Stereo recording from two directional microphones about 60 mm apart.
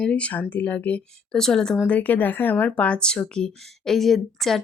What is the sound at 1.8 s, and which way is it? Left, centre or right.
A woman's voice, left.